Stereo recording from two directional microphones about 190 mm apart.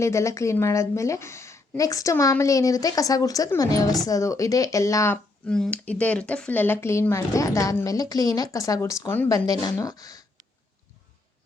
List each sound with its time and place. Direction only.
0.0 s a woman's voice: 15° left (ahead or behind)